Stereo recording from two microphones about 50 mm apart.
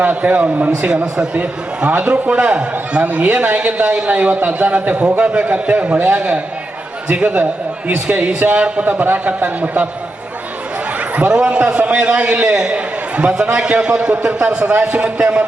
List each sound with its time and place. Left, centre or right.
0.0 s a man's voice: right
11.3 s a man's voice: centre